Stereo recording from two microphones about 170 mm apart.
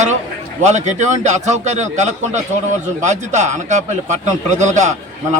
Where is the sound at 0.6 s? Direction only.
45° right (ahead or behind).